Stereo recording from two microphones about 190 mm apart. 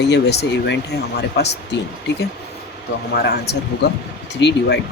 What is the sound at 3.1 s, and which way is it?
Speech, 55° left (ahead or behind).